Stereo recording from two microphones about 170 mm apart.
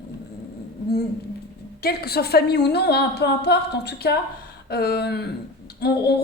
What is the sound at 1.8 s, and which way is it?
Speech, 65° left (ahead or behind).